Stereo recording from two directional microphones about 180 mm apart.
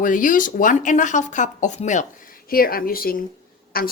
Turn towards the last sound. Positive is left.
turn(degrees=55)  # may be behind; listen again after turning